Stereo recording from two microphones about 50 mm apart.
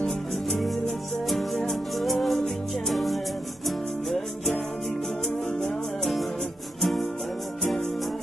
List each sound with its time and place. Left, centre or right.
0.0 s music: centre
6.8 s music: centre